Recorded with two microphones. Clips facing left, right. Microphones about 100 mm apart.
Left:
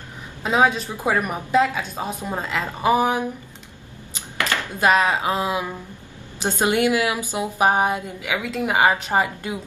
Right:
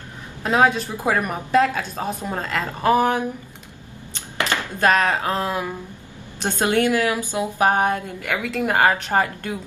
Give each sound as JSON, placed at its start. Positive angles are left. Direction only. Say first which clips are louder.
{"t": 0.4, "sound": "a woman's voice", "louder": "right 1 dB", "side_deg": 5}
{"t": 4.4, "sound": "a sound", "louder": "right 1 dB", "side_deg": -20}
{"t": 4.6, "sound": "speech", "louder": "left 1 dB", "side_deg": 10}